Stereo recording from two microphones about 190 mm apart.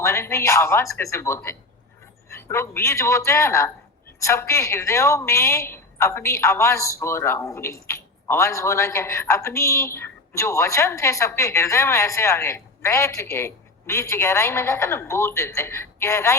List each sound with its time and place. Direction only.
0.0 s a woman's voice: 15° left (ahead or behind)